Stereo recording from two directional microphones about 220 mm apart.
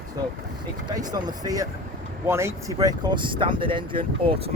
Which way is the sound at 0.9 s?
20° right (ahead or behind).